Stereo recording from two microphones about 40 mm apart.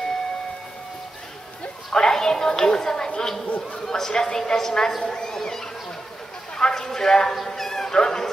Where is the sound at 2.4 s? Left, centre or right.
Centre.